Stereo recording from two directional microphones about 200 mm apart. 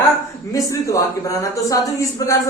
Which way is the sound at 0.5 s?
15° left (ahead or behind).